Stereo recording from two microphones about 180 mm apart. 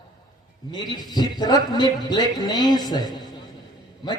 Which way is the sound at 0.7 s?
20° left (ahead or behind).